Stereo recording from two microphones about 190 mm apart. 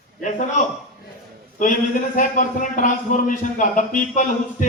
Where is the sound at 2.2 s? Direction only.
45° left (ahead or behind).